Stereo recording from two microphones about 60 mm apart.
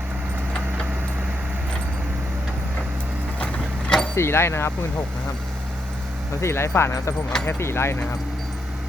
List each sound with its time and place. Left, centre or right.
3.3 s vehicle: centre
4.1 s speech: left
6.4 s speech: left